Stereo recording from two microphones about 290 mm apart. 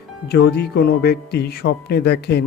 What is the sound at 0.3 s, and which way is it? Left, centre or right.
Speech, left.